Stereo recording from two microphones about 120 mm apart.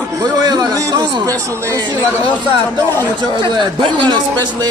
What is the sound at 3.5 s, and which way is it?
A man's voice, 40° right (ahead or behind).